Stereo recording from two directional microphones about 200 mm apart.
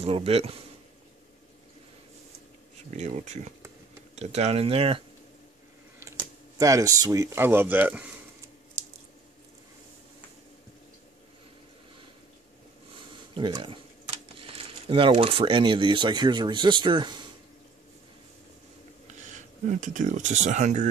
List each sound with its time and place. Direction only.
0.0 s speech: 30° right (ahead or behind)
2.9 s speech: 35° right (ahead or behind)
6.6 s speech: 15° right (ahead or behind)
13.3 s speech: 20° right (ahead or behind)
19.0 s speech: 35° right (ahead or behind)